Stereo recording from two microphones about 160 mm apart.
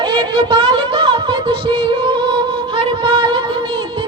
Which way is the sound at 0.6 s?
35° right (ahead or behind).